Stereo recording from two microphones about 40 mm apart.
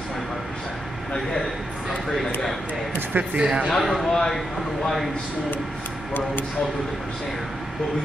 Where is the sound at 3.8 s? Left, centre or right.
Centre.